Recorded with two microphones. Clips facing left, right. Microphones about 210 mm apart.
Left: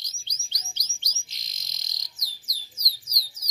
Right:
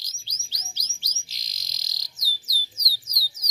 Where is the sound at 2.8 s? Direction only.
15° right (ahead or behind).